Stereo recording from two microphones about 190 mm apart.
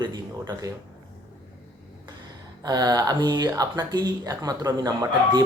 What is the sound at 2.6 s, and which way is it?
Speech, 20° right (ahead or behind).